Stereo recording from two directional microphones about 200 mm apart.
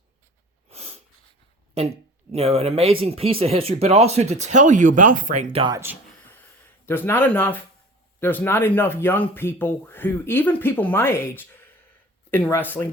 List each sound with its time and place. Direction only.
0.7 s snort: 30° right (ahead or behind)
1.8 s speech: 30° right (ahead or behind)
5.7 s speech: 10° right (ahead or behind)
6.8 s speech: 10° left (ahead or behind)